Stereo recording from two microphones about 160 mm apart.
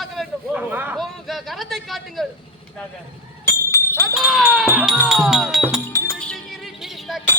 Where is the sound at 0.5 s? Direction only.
10° right (ahead or behind).